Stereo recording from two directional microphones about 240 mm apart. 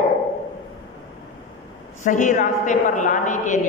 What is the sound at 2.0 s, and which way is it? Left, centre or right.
A man's voice, left.